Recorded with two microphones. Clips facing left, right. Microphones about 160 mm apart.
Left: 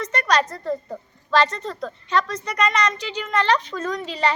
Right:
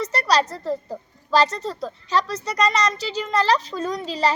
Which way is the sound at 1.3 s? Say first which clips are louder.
Right 1 dB; 40° right (ahead or behind).